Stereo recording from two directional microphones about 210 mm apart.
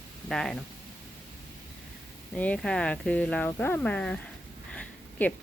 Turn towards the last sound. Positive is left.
turn(degrees=5)  # may be behind; listen again after turning